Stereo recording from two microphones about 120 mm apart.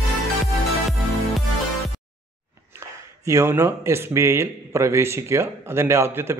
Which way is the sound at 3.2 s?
25° right (ahead or behind).